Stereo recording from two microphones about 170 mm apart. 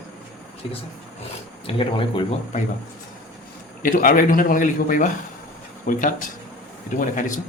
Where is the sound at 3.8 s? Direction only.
55° left (ahead or behind).